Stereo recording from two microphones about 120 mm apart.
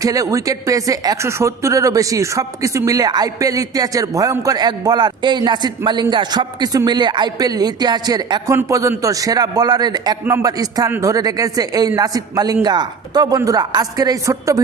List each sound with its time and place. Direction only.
0.0 s speech: 30° right (ahead or behind)